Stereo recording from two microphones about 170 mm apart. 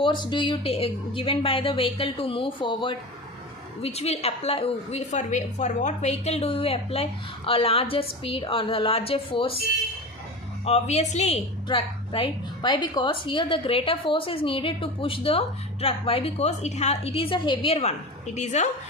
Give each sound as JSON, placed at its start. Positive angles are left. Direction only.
{"t": 0.0, "sound": "a woman's voice", "side_deg": 25}
{"t": 10.7, "sound": "a woman's voice", "side_deg": 40}